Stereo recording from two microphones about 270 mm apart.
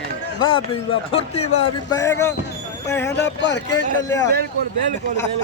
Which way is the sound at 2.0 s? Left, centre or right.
Centre.